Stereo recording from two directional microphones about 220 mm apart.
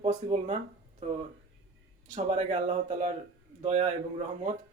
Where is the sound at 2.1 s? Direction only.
35° right (ahead or behind).